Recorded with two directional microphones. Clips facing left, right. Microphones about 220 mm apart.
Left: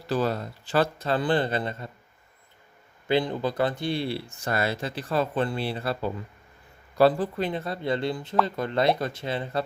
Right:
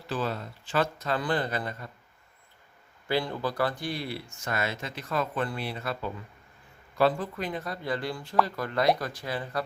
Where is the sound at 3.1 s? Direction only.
20° left (ahead or behind).